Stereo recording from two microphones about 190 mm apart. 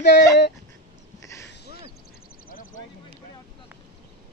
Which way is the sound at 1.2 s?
15° left (ahead or behind).